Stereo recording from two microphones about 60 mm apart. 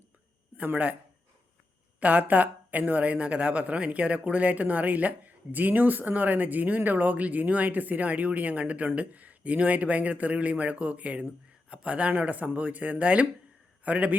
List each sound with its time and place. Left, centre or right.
0.5 s speech: right
2.0 s speech: right